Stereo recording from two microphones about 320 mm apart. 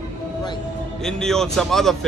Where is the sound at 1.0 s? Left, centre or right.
Centre.